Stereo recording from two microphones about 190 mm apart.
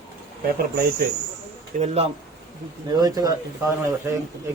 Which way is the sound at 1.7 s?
35° right (ahead or behind).